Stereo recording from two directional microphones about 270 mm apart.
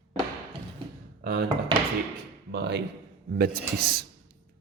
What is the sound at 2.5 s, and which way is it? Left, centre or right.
A man's voice, right.